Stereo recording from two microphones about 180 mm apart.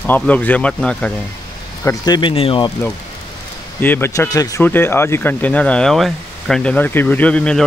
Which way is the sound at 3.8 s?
10° left (ahead or behind).